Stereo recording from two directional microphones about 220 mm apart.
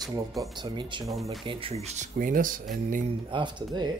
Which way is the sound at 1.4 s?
25° right (ahead or behind).